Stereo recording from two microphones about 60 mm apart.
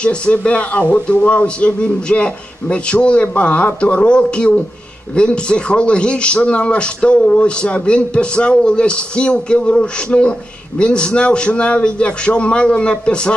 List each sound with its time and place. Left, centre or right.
0.0 s a man's voice: centre